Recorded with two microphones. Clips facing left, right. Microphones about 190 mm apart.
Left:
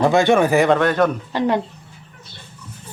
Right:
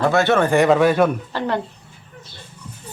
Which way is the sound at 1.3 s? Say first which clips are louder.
Left 4 dB; 15° left (ahead or behind).